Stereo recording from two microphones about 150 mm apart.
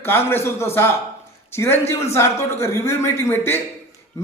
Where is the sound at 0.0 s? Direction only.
15° left (ahead or behind).